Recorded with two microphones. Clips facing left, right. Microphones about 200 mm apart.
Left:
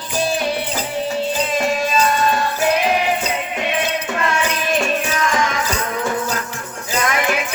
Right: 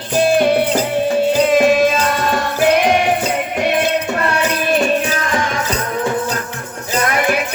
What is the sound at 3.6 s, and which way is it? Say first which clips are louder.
Music: right 7 dB; 60° right (ahead or behind).